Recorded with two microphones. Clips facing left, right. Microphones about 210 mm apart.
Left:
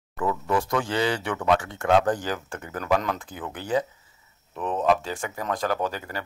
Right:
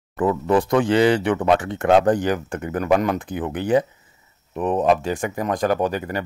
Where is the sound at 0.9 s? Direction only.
60° right (ahead or behind).